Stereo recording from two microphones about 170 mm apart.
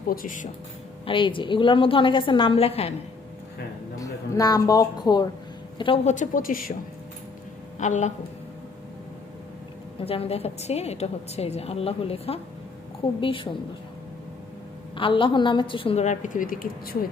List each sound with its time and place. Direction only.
0.1 s speech: 50° left (ahead or behind)
1.0 s a woman's voice: 30° left (ahead or behind)
4.0 s a woman's voice: 20° left (ahead or behind)
6.1 s speech: 50° left (ahead or behind)
7.8 s speech: 45° left (ahead or behind)
10.0 s a woman's voice: 35° left (ahead or behind)
14.9 s a woman's voice: 30° left (ahead or behind); by 17.0 s 60° left (ahead or behind)